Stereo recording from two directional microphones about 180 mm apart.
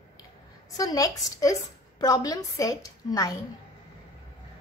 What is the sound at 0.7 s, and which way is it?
A woman's voice, 20° left (ahead or behind).